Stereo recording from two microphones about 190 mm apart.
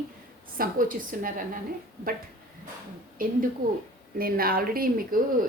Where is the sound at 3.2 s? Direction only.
45° right (ahead or behind).